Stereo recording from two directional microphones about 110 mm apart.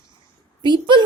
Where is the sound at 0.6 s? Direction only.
40° right (ahead or behind).